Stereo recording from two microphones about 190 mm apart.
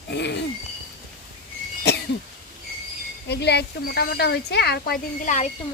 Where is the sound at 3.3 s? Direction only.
60° left (ahead or behind); by 5.5 s 40° left (ahead or behind).